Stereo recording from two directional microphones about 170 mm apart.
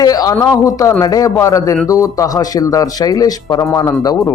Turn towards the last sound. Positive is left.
turn(degrees=20)  # may be behind; listen again after turning